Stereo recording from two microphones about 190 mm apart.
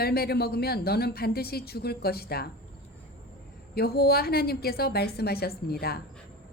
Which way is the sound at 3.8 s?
55° left (ahead or behind).